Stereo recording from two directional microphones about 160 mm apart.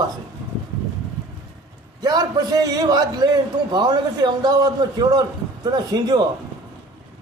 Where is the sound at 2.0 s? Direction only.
25° right (ahead or behind).